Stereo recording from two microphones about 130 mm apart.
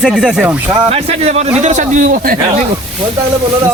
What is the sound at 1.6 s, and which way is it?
Speech, 70° right (ahead or behind).